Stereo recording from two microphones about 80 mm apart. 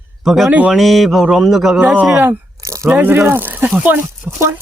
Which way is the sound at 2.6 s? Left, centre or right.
Right.